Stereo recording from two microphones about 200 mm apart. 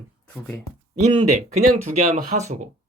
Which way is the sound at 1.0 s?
30° right (ahead or behind).